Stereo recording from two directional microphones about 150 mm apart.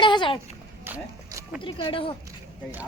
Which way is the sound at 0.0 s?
30° left (ahead or behind).